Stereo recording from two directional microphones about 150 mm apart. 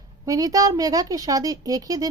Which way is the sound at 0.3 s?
25° right (ahead or behind).